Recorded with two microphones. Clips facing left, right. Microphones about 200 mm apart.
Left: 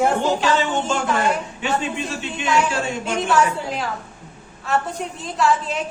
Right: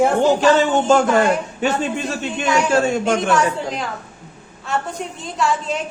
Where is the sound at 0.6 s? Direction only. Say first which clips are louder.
Right 7 dB; 45° right (ahead or behind).